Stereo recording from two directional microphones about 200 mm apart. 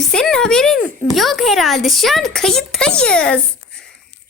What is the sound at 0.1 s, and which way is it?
Speech, 5° left (ahead or behind).